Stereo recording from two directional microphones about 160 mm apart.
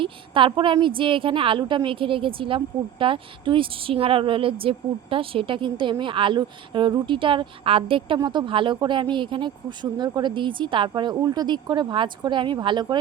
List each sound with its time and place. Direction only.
0.0 s a woman's voice: 35° right (ahead or behind)